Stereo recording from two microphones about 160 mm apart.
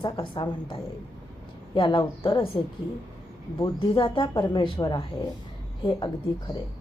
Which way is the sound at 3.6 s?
35° left (ahead or behind).